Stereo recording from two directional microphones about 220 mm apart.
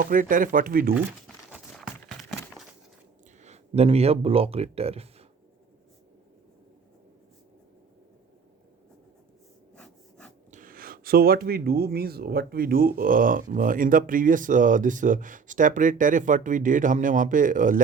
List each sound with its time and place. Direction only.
0.0 s speech: 40° right (ahead or behind)
1.5 s a sound: centre (ahead or behind)
3.4 s speech: 30° right (ahead or behind)
9.7 s wood: 5° left (ahead or behind)
10.5 s speech: 40° right (ahead or behind)